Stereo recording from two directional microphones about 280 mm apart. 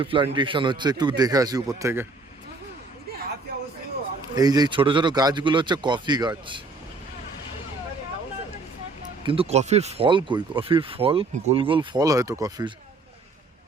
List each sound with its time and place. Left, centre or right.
0.0 s speech: centre
4.4 s speech: centre
9.2 s speech: centre